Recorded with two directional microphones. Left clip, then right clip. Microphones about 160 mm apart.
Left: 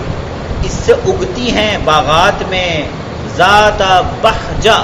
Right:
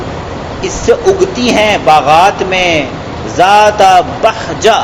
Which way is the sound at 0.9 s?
20° right (ahead or behind).